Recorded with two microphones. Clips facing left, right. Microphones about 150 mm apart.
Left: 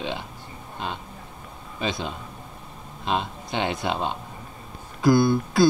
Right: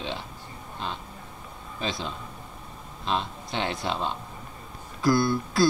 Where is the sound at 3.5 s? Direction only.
Centre (ahead or behind).